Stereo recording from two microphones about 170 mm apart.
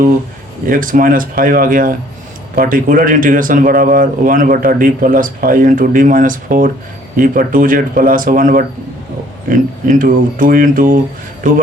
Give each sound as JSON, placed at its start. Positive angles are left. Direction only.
{"t": 0.7, "sound": "speech", "side_deg": -55}